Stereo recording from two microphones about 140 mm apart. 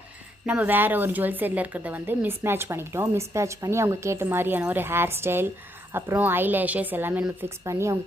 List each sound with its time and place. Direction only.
0.4 s a woman's voice: 10° right (ahead or behind)